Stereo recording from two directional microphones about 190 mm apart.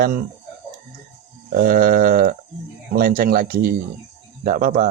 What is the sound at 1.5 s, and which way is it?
Speech, 50° right (ahead or behind).